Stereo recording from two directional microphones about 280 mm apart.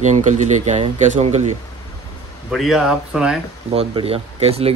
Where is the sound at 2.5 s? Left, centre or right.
Centre.